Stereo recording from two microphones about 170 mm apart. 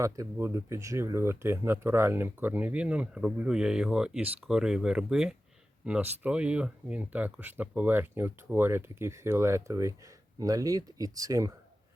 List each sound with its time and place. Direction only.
0.0 s speech: 15° right (ahead or behind)